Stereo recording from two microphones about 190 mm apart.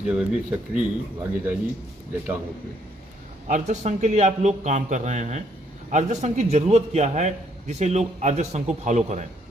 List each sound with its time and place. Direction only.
0.0 s speech: 5° right (ahead or behind)
3.4 s a man's voice: 40° right (ahead or behind)